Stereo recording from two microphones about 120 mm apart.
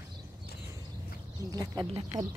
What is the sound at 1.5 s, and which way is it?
Speech, 30° right (ahead or behind).